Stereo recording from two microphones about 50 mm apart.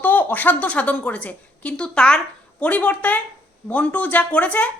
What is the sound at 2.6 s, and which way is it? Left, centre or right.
Speech, left.